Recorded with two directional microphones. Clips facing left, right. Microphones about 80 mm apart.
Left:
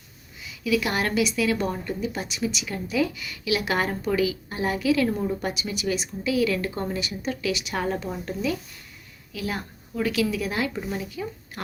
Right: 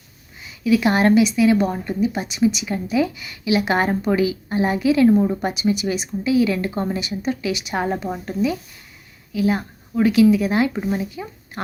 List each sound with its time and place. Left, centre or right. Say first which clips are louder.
0.4 s a woman's voice: right 7 dB; right